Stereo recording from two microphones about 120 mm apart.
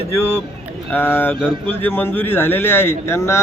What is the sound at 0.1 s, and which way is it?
A man's voice, 20° left (ahead or behind).